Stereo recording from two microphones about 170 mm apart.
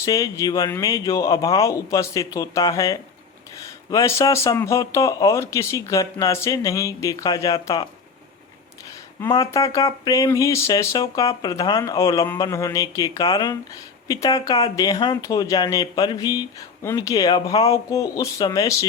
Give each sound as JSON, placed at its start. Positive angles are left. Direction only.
{"t": 0.0, "sound": "speech", "side_deg": 20}
{"t": 9.3, "sound": "speech", "side_deg": 20}